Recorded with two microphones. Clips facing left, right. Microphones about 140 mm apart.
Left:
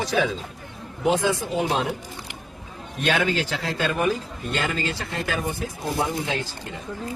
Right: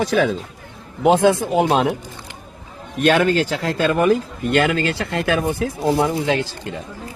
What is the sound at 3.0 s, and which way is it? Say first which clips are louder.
A man's voice: right 7 dB; 50° right (ahead or behind).